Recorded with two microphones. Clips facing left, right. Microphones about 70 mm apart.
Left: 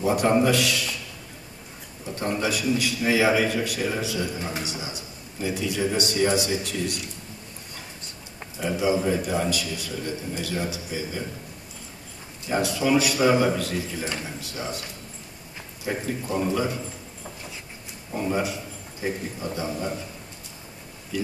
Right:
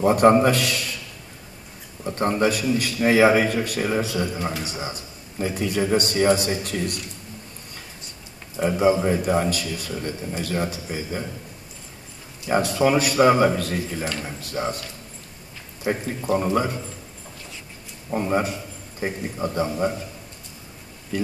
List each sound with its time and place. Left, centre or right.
0.0 s a man's voice: right
2.1 s a man's voice: right
8.5 s a man's voice: right
12.4 s a man's voice: right
15.8 s a man's voice: right
18.1 s speech: right
21.1 s speech: right